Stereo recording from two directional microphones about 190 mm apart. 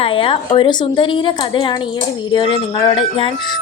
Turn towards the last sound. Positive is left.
turn(degrees=25)  # may be behind; listen again after turning